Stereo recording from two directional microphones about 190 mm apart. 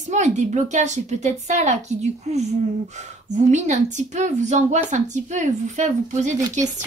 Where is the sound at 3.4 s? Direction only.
40° right (ahead or behind).